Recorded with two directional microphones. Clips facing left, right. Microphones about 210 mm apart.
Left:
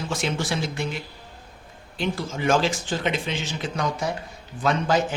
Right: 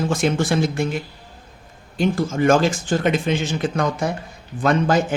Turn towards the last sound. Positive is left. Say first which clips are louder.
# right 4 dB
turn(degrees=-50)  # may be behind; listen again after turning